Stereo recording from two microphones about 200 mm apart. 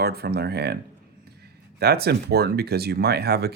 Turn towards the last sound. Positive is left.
turn(degrees=-55)  # may be behind; listen again after turning